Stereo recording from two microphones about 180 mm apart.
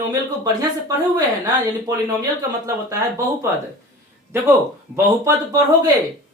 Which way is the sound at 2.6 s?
15° right (ahead or behind).